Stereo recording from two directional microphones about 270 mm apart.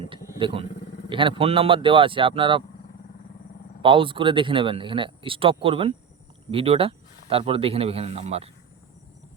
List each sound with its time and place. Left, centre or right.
0.3 s vehicle: centre
1.1 s speech: centre
3.8 s speech: centre